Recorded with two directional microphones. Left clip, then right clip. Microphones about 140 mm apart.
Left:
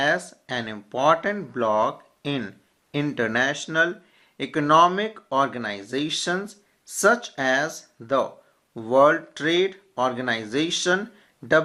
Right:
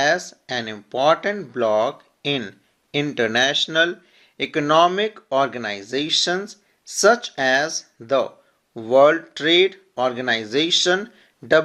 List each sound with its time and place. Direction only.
0.3 s speech: 30° right (ahead or behind)